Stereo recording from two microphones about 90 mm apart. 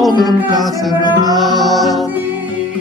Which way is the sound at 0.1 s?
50° left (ahead or behind).